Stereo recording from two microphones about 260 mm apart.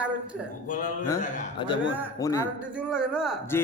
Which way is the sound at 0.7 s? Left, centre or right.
Left.